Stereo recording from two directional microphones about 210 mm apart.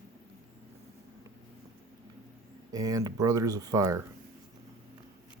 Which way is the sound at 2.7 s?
15° right (ahead or behind).